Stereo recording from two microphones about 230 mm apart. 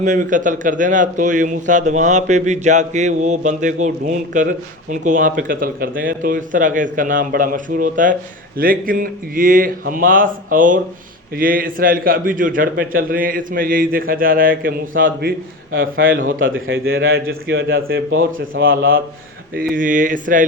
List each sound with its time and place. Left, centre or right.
0.0 s a man's voice: right
16.4 s a man's voice: right
16.8 s speech: right
17.2 s speech: right
18.5 s speech: right
19.5 s a man's voice: right